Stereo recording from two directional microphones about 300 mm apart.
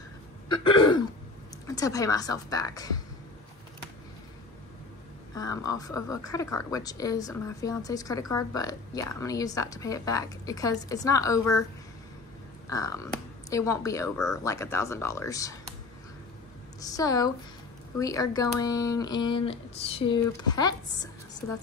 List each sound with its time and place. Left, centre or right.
0.5 s throat clearing: centre
1.7 s a woman's voice: centre
5.3 s a woman's voice: centre
12.6 s a woman's voice: centre
16.8 s a woman's voice: centre